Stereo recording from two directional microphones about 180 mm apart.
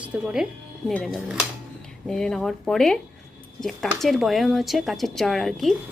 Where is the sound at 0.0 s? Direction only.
5° right (ahead or behind).